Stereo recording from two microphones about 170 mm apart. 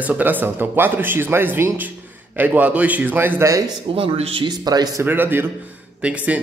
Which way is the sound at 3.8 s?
35° right (ahead or behind).